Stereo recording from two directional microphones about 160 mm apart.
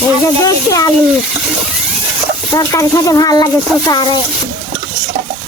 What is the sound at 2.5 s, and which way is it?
Speech, 20° left (ahead or behind).